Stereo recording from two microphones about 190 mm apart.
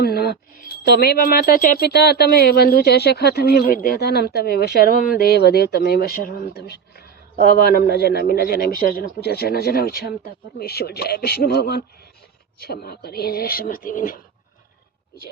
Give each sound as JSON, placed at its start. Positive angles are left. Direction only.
{"t": 0.0, "sound": "speech", "side_deg": 55}